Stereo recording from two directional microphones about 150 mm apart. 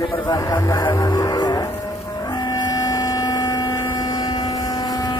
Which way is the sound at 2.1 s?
30° left (ahead or behind).